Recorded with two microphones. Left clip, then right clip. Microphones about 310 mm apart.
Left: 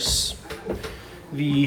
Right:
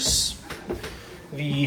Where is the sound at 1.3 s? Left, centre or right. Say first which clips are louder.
Left 5 dB; centre.